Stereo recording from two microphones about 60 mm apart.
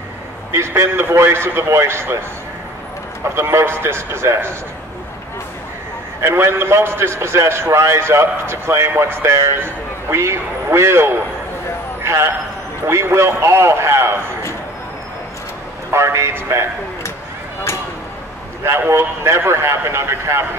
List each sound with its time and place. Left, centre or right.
0.5 s a man's voice: right
3.3 s a man's voice: right
6.2 s a man's voice: right
12.0 s a sound: right
12.8 s a man's voice: right
15.9 s a man's voice: right
18.6 s a man's voice: right